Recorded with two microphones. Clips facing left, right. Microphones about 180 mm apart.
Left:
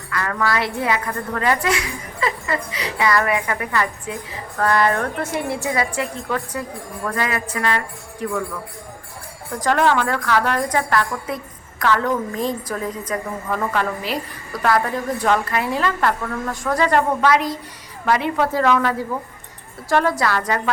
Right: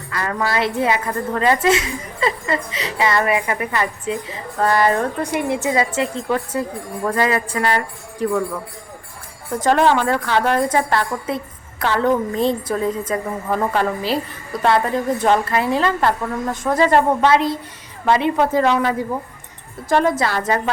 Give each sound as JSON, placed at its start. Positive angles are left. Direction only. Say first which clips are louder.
{"t": 0.1, "sound": "a woman's voice", "louder": "even", "side_deg": -25}
{"t": 9.6, "sound": "a woman's voice", "louder": "right 2 dB", "side_deg": -25}